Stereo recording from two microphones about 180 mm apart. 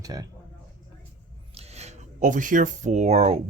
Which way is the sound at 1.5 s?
35° right (ahead or behind).